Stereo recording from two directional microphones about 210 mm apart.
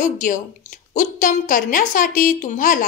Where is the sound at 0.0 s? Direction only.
40° left (ahead or behind).